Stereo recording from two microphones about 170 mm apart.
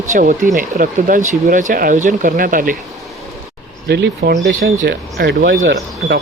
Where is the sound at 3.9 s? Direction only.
75° right (ahead or behind).